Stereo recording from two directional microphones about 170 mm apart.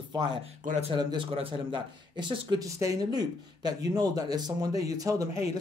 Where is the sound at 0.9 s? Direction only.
30° right (ahead or behind).